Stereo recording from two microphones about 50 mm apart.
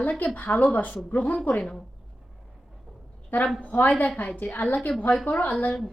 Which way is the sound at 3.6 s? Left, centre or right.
Left.